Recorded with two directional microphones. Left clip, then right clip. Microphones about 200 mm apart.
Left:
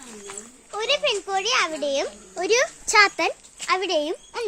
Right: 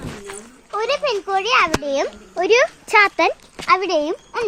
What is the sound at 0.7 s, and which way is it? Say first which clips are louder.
A child's voice: right 3 dB; 15° right (ahead or behind).